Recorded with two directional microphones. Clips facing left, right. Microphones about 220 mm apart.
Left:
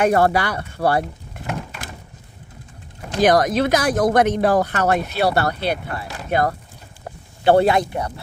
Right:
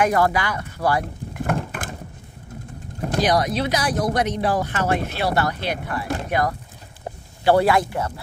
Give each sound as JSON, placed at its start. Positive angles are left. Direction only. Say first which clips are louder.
{"t": 0.0, "sound": "speech", "louder": "left 3 dB", "side_deg": 30}
{"t": 1.5, "sound": "a sound", "louder": "right 3 dB", "side_deg": -50}
{"t": 3.2, "sound": "speech", "louder": "left 5 dB", "side_deg": 50}